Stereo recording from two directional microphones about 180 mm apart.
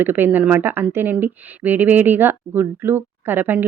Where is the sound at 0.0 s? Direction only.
10° right (ahead or behind).